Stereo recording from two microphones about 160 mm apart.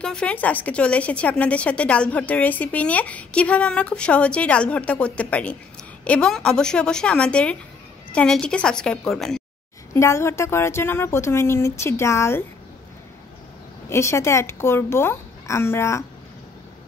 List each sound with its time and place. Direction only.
0.0 s a woman's voice: 5° left (ahead or behind)
9.9 s a woman's voice: 20° left (ahead or behind)
13.8 s a woman's voice: 15° left (ahead or behind)